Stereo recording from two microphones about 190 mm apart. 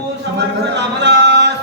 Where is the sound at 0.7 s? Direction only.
65° right (ahead or behind).